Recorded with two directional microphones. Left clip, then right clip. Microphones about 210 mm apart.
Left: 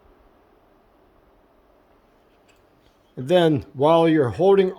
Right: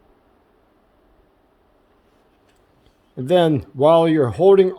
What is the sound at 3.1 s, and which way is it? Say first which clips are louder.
Speech: right 2 dB; 15° right (ahead or behind).